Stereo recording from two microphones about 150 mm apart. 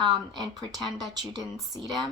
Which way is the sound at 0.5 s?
30° right (ahead or behind).